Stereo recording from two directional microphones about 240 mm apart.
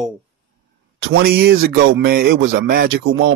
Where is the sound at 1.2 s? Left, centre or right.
Right.